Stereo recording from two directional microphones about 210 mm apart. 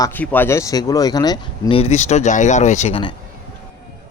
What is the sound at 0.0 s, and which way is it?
Speech, 10° left (ahead or behind).